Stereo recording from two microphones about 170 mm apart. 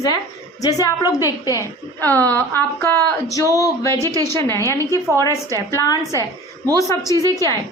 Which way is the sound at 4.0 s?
20° right (ahead or behind).